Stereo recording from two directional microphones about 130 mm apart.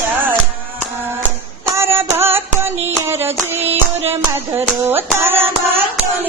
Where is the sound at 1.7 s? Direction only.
20° right (ahead or behind).